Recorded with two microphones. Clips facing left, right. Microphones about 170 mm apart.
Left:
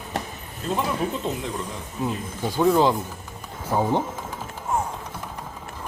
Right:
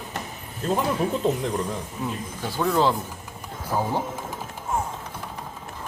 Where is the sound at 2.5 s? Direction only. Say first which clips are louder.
Left 3 dB; 15° left (ahead or behind).